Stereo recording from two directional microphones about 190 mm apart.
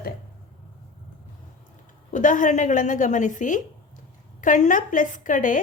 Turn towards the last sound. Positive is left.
turn(degrees=45)  # may be behind; listen again after turning